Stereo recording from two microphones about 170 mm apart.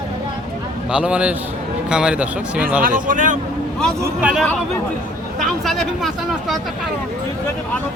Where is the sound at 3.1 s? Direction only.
50° right (ahead or behind).